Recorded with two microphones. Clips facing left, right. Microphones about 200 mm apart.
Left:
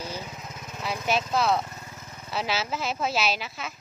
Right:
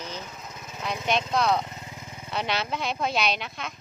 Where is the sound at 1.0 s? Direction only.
5° left (ahead or behind).